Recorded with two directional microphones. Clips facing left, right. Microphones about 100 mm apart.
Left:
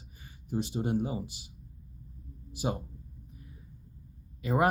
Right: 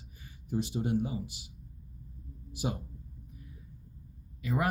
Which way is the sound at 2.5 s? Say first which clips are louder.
Left 2 dB; 30° left (ahead or behind).